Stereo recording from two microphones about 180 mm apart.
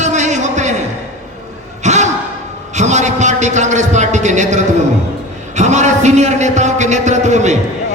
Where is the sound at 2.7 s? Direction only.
40° right (ahead or behind).